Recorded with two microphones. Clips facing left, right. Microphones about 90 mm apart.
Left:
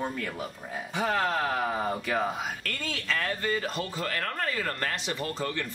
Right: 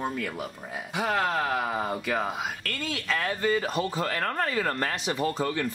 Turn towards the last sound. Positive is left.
turn(degrees=-15)  # may be behind; listen again after turning